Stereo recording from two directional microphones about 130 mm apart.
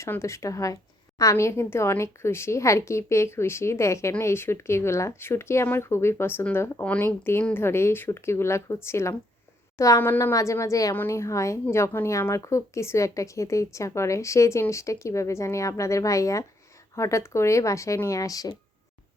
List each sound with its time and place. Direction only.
0.0 s speech: 20° left (ahead or behind)